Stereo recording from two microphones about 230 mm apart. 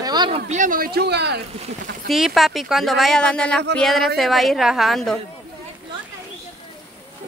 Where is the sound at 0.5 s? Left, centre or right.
Right.